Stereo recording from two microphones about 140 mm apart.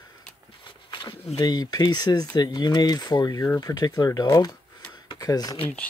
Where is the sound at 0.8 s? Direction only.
30° left (ahead or behind).